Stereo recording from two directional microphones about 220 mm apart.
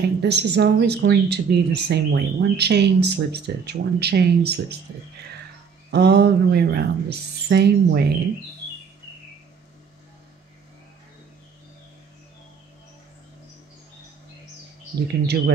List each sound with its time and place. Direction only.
0.2 s speech: 50° right (ahead or behind)
5.9 s speech: 50° right (ahead or behind)
15.0 s speech: 50° right (ahead or behind)